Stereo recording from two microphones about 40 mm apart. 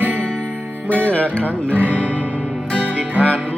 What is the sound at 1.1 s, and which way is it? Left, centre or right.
Speech, left.